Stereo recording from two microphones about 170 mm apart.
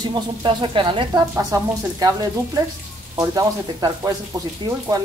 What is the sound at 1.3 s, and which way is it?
Speech, 15° right (ahead or behind).